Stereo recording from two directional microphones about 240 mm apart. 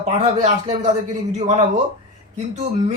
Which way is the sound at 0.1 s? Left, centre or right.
Right.